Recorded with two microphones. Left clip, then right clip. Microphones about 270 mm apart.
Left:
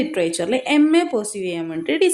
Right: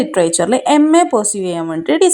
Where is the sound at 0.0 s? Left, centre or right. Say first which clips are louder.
Right 7 dB; right.